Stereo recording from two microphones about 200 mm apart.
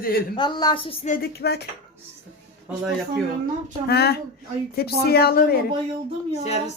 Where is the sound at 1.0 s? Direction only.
45° left (ahead or behind).